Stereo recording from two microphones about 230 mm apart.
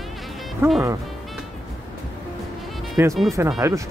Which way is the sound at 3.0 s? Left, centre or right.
Centre.